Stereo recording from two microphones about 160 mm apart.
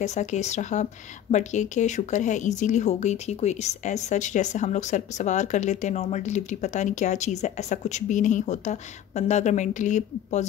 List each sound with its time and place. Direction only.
0.0 s a woman's voice: 45° left (ahead or behind)